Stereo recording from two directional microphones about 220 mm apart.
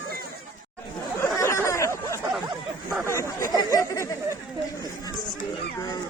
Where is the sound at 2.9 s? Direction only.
10° right (ahead or behind).